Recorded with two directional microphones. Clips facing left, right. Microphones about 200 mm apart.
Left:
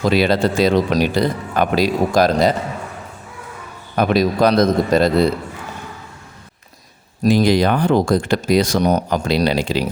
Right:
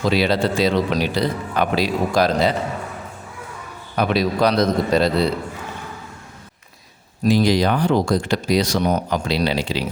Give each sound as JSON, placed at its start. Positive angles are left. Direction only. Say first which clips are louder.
{"t": 0.1, "sound": "speech", "louder": "left 2 dB", "side_deg": 50}
{"t": 3.9, "sound": "speech", "louder": "left 3 dB", "side_deg": 45}
{"t": 7.2, "sound": "speech", "louder": "left 2 dB", "side_deg": 50}